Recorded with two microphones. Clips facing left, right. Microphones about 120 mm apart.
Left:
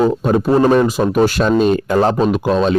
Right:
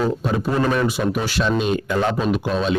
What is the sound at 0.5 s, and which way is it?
Speech, 35° left (ahead or behind).